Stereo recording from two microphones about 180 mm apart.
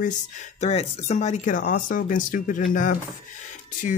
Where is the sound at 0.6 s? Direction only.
35° left (ahead or behind).